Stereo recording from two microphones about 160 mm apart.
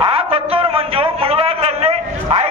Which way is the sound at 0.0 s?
35° right (ahead or behind).